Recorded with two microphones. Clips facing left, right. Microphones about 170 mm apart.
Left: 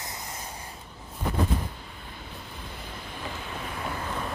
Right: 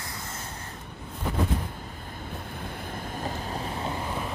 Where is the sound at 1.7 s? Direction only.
45° right (ahead or behind); by 4.2 s 20° right (ahead or behind).